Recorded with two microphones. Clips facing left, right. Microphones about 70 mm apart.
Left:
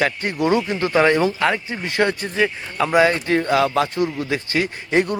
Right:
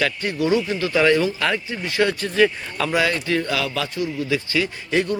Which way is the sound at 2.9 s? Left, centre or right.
Left.